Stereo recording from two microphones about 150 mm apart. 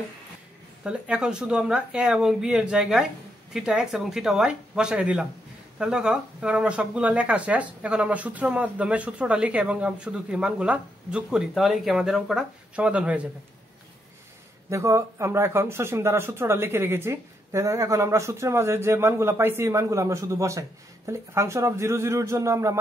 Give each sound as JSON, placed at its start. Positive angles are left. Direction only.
{"t": 0.8, "sound": "speech", "side_deg": -5}
{"t": 14.7, "sound": "speech", "side_deg": -20}